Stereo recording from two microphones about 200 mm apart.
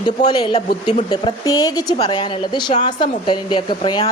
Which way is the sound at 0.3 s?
20° left (ahead or behind).